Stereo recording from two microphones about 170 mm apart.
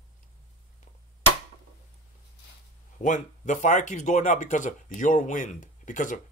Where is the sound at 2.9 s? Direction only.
45° left (ahead or behind).